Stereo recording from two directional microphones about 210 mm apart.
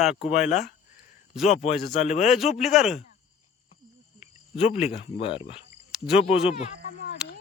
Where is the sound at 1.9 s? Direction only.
35° left (ahead or behind).